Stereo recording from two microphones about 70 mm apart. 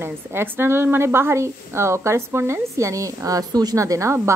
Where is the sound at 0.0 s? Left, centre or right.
Right.